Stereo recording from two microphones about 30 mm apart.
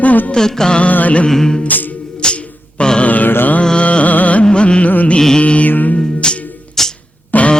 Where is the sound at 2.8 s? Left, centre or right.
Left.